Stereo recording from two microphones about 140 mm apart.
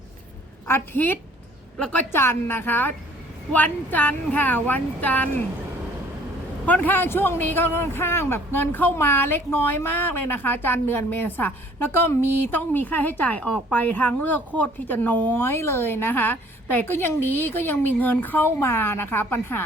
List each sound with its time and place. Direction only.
0.7 s a man's voice: 15° left (ahead or behind)
6.7 s a man's voice: 10° left (ahead or behind)